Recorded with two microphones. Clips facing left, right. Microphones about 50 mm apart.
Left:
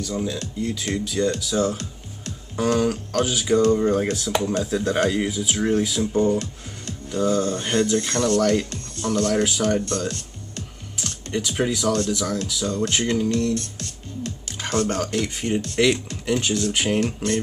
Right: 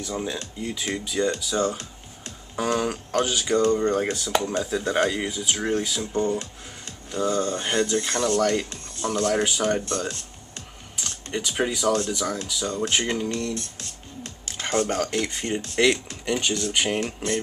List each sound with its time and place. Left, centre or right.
0.0 s speech: centre
3.3 s speech: centre
11.0 s typing: centre
11.3 s speech: centre
13.6 s music: right
14.9 s speech: centre
17.0 s speech: right